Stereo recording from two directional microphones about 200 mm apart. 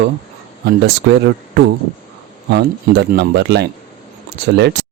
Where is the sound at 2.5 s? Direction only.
55° right (ahead or behind).